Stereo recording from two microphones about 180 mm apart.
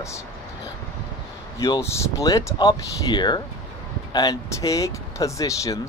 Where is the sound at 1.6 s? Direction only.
15° left (ahead or behind).